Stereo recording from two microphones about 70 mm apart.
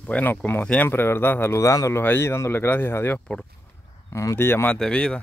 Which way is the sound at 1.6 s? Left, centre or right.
Left.